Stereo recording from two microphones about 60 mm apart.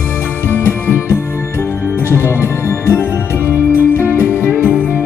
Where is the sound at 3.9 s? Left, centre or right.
Left.